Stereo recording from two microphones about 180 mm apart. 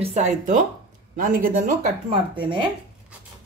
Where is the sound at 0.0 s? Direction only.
35° right (ahead or behind).